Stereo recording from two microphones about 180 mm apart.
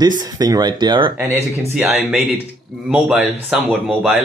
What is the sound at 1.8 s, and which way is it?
Speech, 10° right (ahead or behind).